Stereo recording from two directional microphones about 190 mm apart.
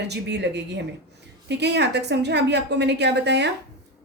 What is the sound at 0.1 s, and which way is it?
A woman's voice, 60° right (ahead or behind).